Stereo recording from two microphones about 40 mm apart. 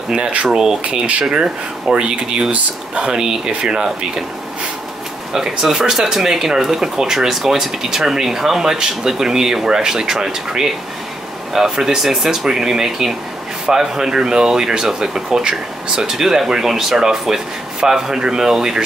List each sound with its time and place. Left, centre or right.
0.5 s speech: centre
5.3 s speech: centre